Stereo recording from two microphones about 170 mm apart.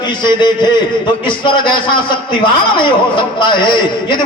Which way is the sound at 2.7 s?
30° left (ahead or behind).